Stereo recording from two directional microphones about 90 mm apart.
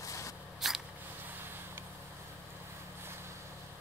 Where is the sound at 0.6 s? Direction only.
5° right (ahead or behind).